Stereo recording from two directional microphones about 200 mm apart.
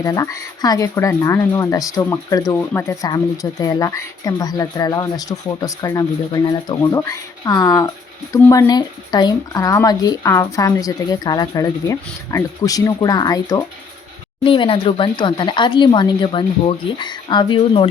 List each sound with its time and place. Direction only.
0.0 s speech: 15° left (ahead or behind)